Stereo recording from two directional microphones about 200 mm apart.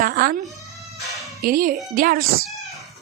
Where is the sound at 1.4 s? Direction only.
45° right (ahead or behind).